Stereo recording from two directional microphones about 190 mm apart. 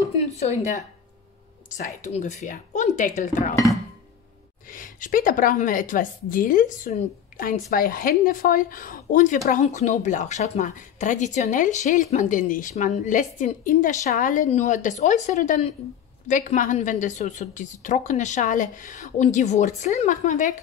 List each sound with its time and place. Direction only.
0.4 s a woman's voice: 35° left (ahead or behind)
4.6 s a woman's voice: 45° left (ahead or behind)